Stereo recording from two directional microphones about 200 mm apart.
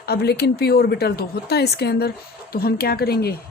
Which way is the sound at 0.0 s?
55° left (ahead or behind).